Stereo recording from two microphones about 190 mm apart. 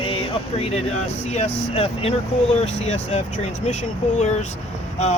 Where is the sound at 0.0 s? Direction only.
30° left (ahead or behind).